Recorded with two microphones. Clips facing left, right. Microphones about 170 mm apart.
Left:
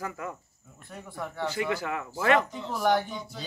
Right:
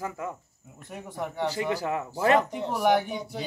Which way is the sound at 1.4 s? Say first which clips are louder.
Right 1 dB; 35° right (ahead or behind).